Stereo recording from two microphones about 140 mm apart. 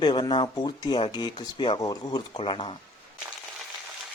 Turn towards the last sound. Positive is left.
turn(degrees=40)  # may be behind; listen again after turning